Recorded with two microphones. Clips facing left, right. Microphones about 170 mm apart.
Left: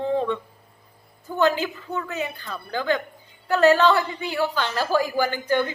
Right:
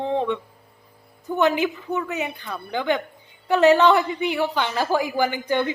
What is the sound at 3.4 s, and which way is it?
Speech, 20° right (ahead or behind).